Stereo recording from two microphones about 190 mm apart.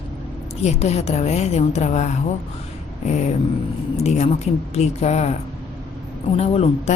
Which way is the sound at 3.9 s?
35° left (ahead or behind).